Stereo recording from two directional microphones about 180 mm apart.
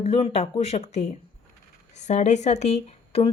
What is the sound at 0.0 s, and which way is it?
Speech, 35° left (ahead or behind).